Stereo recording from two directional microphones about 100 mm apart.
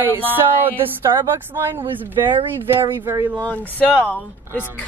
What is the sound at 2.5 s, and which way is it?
Speech, 20° right (ahead or behind).